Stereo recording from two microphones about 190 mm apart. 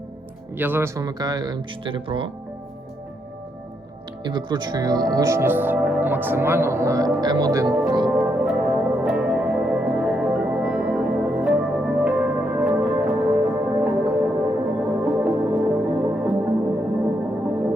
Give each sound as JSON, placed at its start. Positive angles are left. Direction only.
{"t": 0.5, "sound": "speech", "side_deg": -10}
{"t": 4.2, "sound": "speech", "side_deg": -25}
{"t": 8.0, "sound": "music", "side_deg": 0}